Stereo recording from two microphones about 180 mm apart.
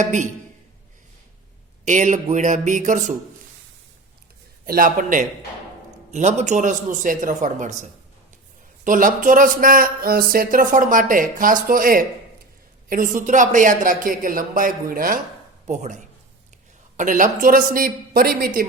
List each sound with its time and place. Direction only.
0.0 s speech: 40° right (ahead or behind)
1.8 s speech: 45° right (ahead or behind)
4.6 s speech: 55° right (ahead or behind)
15.6 s speech: 40° right (ahead or behind)